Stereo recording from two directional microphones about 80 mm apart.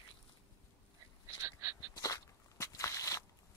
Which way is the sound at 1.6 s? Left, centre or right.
Right.